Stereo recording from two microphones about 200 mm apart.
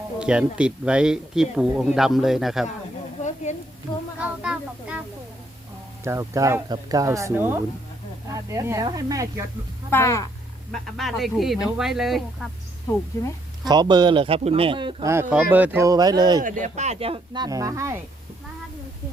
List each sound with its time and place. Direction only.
0.2 s speech: 5° right (ahead or behind)
3.5 s a sound: 35° left (ahead or behind)
4.2 s a sound: 5° right (ahead or behind)
6.1 s speech: 15° right (ahead or behind)
9.9 s speech: 15° left (ahead or behind)
10.7 s speech: centre (ahead or behind)
13.7 s speech: 20° right (ahead or behind)
15.1 s speech: 10° right (ahead or behind)
16.4 s speech: 40° right (ahead or behind); by 18.0 s 15° right (ahead or behind)